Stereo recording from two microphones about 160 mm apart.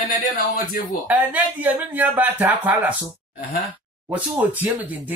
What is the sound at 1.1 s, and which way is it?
Speech, 10° right (ahead or behind).